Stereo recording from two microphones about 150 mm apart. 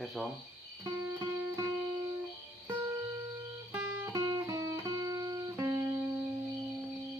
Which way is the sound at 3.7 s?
20° right (ahead or behind).